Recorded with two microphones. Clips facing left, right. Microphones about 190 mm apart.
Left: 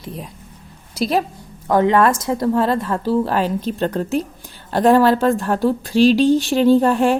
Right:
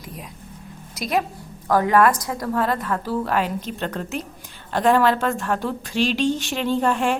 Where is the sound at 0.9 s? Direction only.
30° left (ahead or behind).